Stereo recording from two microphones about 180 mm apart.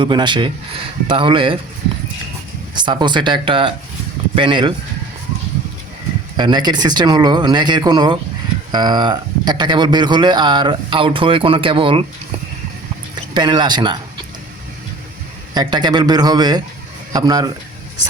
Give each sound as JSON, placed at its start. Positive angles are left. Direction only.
{"t": 0.0, "sound": "a man's voice", "side_deg": -25}
{"t": 2.7, "sound": "a man's voice", "side_deg": -25}
{"t": 6.3, "sound": "a man's voice", "side_deg": -25}
{"t": 13.3, "sound": "a man's voice", "side_deg": -25}
{"t": 15.5, "sound": "a man's voice", "side_deg": -25}